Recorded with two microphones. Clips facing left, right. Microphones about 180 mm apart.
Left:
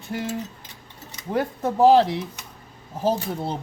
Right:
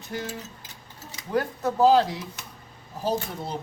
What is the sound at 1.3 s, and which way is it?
Speech, 25° left (ahead or behind).